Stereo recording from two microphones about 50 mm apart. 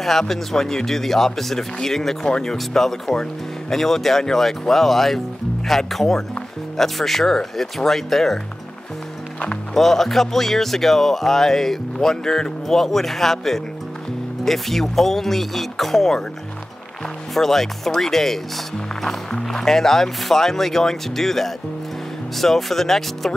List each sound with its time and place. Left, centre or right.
0.0 s speech: centre
2.2 s speech: centre
2.5 s speech: centre
9.8 s speech: centre
17.3 s speech: centre